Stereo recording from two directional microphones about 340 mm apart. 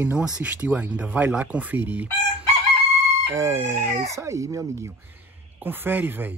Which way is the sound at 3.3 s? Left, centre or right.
Centre.